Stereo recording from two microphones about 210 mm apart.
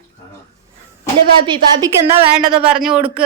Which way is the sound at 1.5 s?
20° right (ahead or behind).